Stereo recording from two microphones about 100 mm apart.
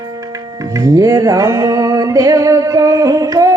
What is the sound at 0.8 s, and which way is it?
Music, 35° right (ahead or behind).